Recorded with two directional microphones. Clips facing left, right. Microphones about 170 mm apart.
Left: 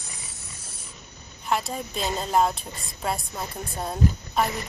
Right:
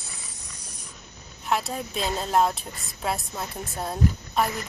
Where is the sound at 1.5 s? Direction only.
Centre (ahead or behind).